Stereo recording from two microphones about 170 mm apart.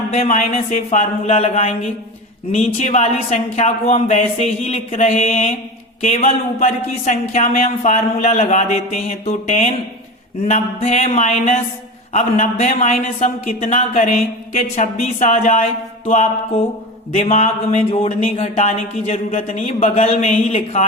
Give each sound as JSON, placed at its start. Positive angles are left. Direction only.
{"t": 0.5, "sound": "speech", "side_deg": 45}